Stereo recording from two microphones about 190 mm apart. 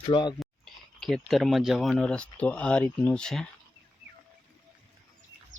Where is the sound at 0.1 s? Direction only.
25° left (ahead or behind).